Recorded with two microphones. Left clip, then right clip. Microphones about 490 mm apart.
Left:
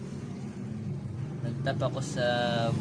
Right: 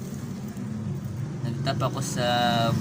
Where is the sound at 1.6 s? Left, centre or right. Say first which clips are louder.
Right 3 dB; left.